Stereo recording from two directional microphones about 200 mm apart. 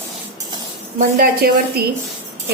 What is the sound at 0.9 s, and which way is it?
Speech, 45° right (ahead or behind).